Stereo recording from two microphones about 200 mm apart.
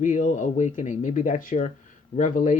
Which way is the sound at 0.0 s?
40° left (ahead or behind).